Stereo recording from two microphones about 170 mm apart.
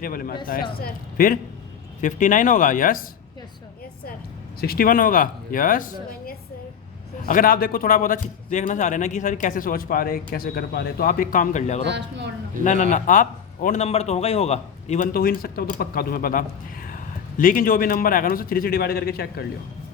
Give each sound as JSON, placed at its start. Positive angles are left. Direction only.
{"t": 0.0, "sound": "a man's voice", "side_deg": 60}
{"t": 2.0, "sound": "a man's voice", "side_deg": 50}
{"t": 4.6, "sound": "a man's voice", "side_deg": 60}
{"t": 11.8, "sound": "speech", "side_deg": -90}
{"t": 12.6, "sound": "a man's voice", "side_deg": 45}
{"t": 13.8, "sound": "a man's voice", "side_deg": 35}